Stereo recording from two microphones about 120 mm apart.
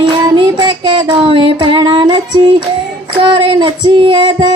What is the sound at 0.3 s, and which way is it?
Music, 40° right (ahead or behind).